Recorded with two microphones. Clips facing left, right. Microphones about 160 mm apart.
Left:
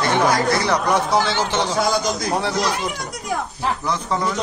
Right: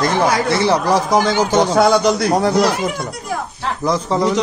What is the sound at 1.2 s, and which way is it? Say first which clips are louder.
Speech: right 6 dB; 40° right (ahead or behind).